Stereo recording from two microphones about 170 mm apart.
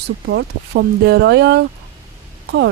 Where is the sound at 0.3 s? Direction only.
85° right.